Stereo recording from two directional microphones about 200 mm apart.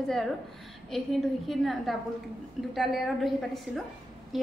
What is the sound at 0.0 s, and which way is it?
A woman's voice, centre (ahead or behind).